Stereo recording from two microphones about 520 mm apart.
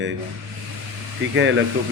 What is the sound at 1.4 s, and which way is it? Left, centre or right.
Speech, right.